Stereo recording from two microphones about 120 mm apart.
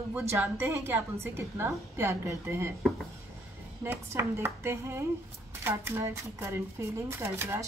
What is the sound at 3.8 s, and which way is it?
A woman's voice, 20° right (ahead or behind).